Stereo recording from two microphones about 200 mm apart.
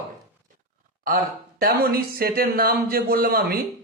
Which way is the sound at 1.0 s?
50° right (ahead or behind).